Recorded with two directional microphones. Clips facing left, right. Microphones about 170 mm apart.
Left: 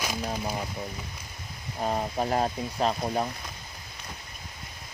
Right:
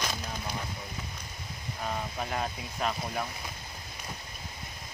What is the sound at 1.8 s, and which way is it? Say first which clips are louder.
Speech: left 7 dB; 35° left (ahead or behind).